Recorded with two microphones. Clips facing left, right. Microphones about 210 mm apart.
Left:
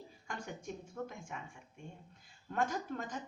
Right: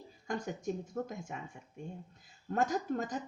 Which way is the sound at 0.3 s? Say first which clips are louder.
Right 8 dB; 40° right (ahead or behind).